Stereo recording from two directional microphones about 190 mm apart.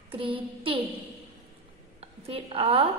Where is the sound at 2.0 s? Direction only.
30° right (ahead or behind).